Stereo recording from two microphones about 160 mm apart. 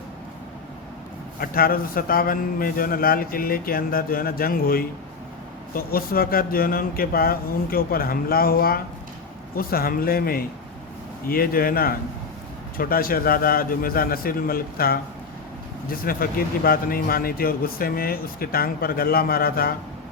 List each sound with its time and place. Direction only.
1.4 s a man's voice: 65° left (ahead or behind)